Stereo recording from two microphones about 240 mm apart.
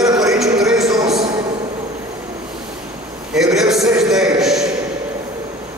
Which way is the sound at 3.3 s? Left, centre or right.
Centre.